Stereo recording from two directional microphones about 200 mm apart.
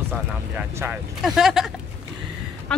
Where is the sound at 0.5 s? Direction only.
5° right (ahead or behind).